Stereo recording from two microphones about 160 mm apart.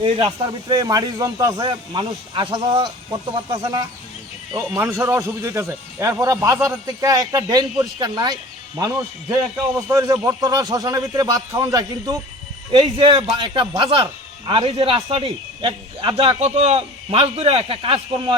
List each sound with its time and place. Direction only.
0.4 s speech: 20° right (ahead or behind)
1.7 s a man's voice: 30° right (ahead or behind)